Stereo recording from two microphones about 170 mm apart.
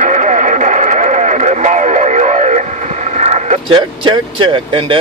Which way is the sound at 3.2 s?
40° right (ahead or behind).